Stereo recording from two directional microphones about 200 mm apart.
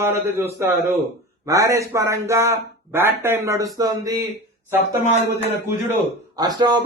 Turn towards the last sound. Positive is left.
turn(degrees=-20)  # may be behind; listen again after turning